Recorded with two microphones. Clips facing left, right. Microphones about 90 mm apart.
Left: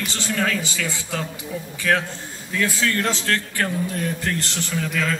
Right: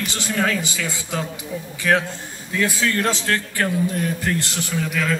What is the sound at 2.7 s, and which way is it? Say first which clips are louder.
Speech: right 1 dB; 20° right (ahead or behind).